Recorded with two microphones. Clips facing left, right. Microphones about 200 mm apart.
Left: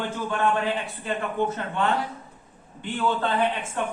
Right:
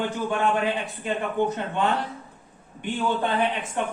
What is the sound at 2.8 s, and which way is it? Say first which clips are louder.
A man's voice: even; 15° right (ahead or behind).